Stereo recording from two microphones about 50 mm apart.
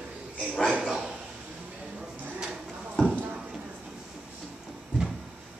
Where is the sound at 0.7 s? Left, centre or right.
Centre.